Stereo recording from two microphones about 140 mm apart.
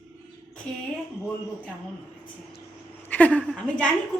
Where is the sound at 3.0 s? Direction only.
10° left (ahead or behind).